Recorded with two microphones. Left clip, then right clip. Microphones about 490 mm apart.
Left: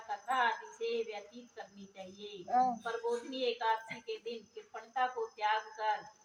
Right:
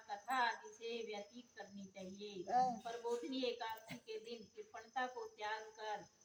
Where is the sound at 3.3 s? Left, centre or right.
Right.